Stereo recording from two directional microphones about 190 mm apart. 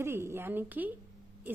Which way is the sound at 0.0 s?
15° right (ahead or behind).